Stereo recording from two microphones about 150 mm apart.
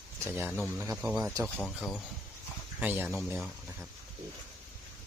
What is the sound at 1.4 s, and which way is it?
Speech, 5° left (ahead or behind).